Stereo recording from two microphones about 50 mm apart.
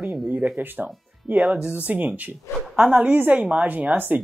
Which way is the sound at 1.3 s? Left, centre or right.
Centre.